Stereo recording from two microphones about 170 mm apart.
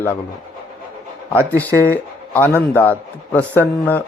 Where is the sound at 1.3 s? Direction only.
10° left (ahead or behind).